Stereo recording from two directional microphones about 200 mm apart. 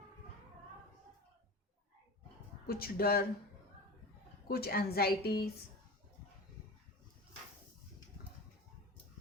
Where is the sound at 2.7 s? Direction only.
50° left (ahead or behind).